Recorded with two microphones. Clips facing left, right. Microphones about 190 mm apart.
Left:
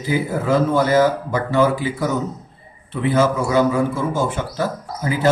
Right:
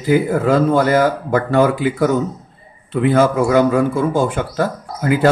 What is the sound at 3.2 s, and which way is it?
A man's voice, 55° right (ahead or behind).